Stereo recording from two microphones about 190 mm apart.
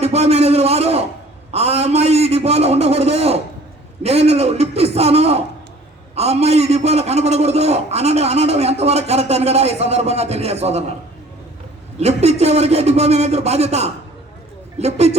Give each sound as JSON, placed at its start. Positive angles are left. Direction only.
{"t": 0.0, "sound": "a man's voice", "side_deg": -35}
{"t": 11.9, "sound": "a man's voice", "side_deg": -35}